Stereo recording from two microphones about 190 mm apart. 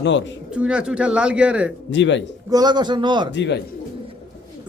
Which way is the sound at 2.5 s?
20° right (ahead or behind).